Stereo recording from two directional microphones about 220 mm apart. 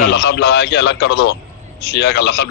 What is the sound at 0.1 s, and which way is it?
Speech, 50° left (ahead or behind).